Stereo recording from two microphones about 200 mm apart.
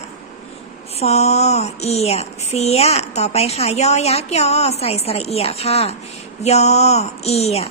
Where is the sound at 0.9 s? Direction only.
30° left (ahead or behind).